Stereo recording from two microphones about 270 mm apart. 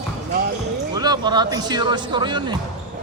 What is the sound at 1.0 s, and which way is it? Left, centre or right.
Speech, centre.